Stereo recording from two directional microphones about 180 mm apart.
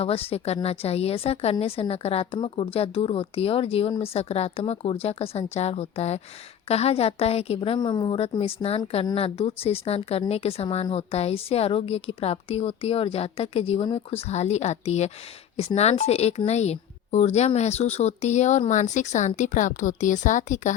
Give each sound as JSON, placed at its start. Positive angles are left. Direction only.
{"t": 0.0, "sound": "a woman's voice", "side_deg": 35}